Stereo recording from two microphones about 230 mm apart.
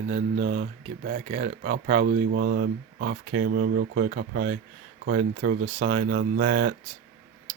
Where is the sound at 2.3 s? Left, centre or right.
Right.